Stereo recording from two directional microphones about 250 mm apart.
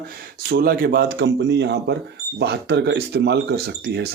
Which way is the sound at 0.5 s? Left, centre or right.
Right.